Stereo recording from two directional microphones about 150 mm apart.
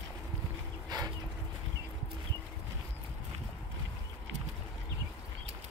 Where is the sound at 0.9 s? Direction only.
30° right (ahead or behind).